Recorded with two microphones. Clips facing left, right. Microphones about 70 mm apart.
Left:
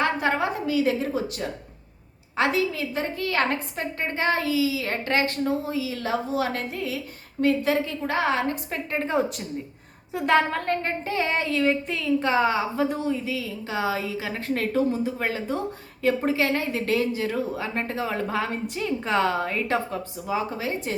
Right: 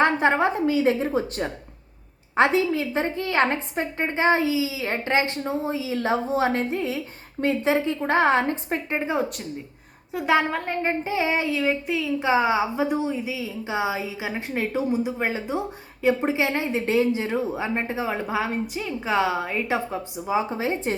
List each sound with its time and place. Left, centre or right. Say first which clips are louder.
0.0 s a woman's voice: right 4 dB; right
9.0 s speech: left 4 dB; centre; by 20.9 s right